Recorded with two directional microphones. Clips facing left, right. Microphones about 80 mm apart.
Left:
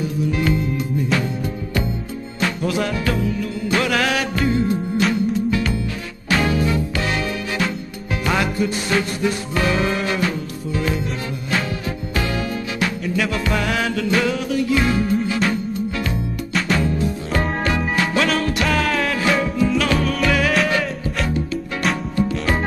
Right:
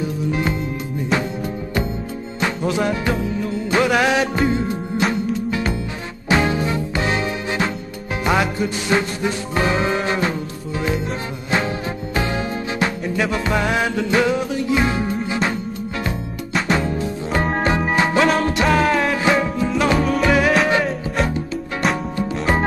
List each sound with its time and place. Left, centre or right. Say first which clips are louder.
0.3 s music: left 2 dB; right
2.4 s music: right 1 dB; right
6.2 s music: right 1 dB; right
16.6 s music: left 1 dB; right